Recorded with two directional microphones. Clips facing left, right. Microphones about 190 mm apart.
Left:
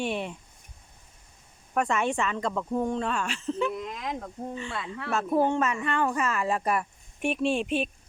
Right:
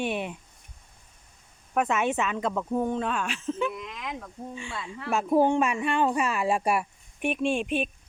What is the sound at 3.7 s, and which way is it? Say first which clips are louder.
Speech: left 3 dB; 40° left (ahead or behind).